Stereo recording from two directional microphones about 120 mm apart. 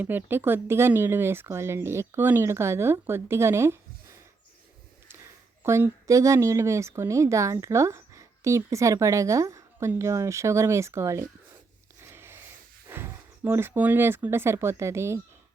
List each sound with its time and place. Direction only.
0.0 s speech: 15° right (ahead or behind)
5.6 s speech: 20° right (ahead or behind)
12.1 s a sound: 20° right (ahead or behind)
12.9 s speech: 20° right (ahead or behind)